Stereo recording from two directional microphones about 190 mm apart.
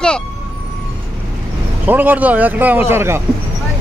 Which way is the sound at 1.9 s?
10° right (ahead or behind).